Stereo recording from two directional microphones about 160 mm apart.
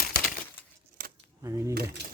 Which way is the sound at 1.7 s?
90° right.